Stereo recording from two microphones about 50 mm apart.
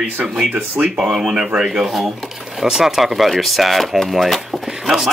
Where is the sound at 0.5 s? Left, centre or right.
Right.